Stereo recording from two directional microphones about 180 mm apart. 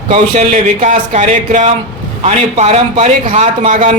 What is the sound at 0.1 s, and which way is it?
A man's voice, 40° right (ahead or behind).